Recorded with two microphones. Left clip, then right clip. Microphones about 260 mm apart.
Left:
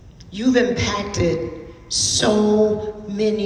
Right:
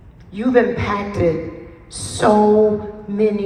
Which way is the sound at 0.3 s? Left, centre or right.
Centre.